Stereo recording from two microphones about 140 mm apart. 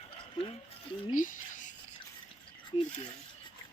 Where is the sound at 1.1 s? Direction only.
70° left (ahead or behind).